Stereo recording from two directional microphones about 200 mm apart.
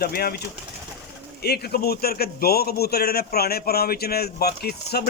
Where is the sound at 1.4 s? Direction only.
50° left (ahead or behind).